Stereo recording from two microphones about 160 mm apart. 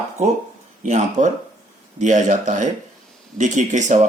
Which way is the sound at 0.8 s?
50° right (ahead or behind).